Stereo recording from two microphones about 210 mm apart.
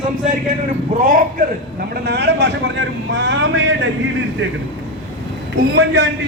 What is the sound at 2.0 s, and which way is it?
A man's voice, 50° right (ahead or behind).